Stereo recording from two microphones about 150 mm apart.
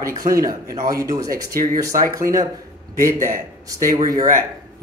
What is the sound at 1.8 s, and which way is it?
A man's voice, 20° right (ahead or behind).